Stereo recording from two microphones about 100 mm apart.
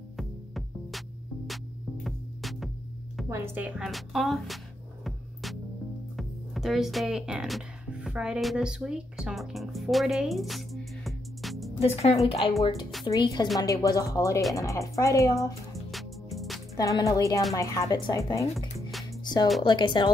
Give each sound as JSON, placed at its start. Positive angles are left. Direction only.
{"t": 0.2, "sound": "music", "side_deg": 0}
{"t": 2.0, "sound": "music", "side_deg": 0}
{"t": 3.3, "sound": "speech", "side_deg": -25}
{"t": 3.8, "sound": "a woman's voice", "side_deg": 0}
{"t": 5.0, "sound": "music", "side_deg": 0}
{"t": 6.1, "sound": "speech", "side_deg": 0}
{"t": 11.8, "sound": "speech", "side_deg": 85}
{"t": 12.3, "sound": "a woman's voice", "side_deg": 60}
{"t": 13.0, "sound": "a woman's voice", "side_deg": 45}
{"t": 15.9, "sound": "music", "side_deg": 0}
{"t": 16.7, "sound": "speech", "side_deg": 35}
{"t": 19.6, "sound": "a woman's voice", "side_deg": 50}